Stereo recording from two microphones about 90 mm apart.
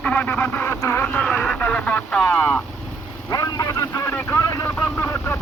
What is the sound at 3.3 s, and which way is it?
Speech, 45° left (ahead or behind).